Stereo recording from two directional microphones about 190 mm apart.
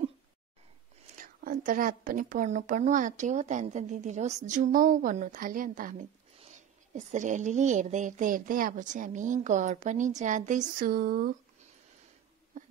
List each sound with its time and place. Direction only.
1.1 s a woman's voice: 45° right (ahead or behind)